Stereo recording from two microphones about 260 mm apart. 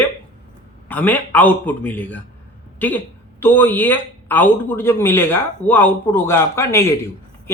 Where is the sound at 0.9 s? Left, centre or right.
Centre.